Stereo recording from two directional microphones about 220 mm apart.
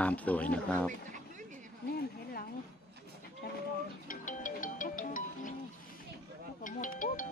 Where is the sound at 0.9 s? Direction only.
35° right (ahead or behind).